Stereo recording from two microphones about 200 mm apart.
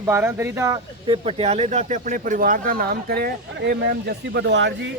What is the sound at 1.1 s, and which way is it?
Speech, 30° right (ahead or behind).